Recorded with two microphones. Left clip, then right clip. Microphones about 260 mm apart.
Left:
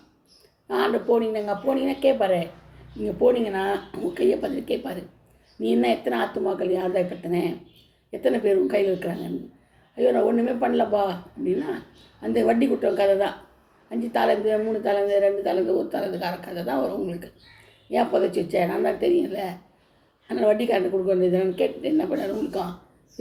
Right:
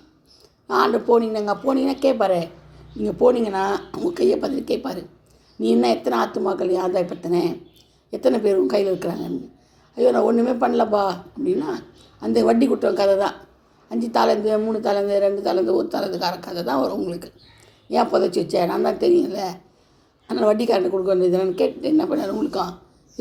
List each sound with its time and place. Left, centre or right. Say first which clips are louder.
0.7 s speech: right 5 dB; right